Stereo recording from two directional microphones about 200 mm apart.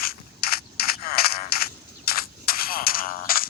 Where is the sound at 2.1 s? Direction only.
45° left (ahead or behind).